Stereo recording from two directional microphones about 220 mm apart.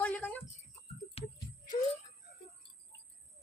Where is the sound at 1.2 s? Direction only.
25° left (ahead or behind).